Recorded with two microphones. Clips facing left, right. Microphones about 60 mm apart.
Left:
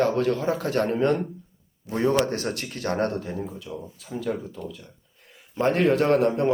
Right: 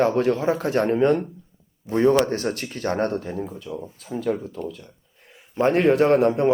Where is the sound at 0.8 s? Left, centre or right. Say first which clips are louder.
Right 3 dB; centre.